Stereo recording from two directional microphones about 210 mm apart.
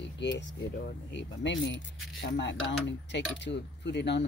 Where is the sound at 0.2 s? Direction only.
55° left (ahead or behind).